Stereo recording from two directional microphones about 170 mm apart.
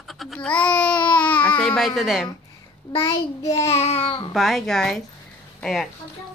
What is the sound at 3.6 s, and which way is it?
Speech, 35° left (ahead or behind).